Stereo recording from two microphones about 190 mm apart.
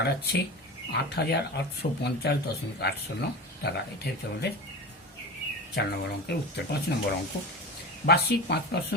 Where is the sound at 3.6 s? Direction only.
60° left (ahead or behind).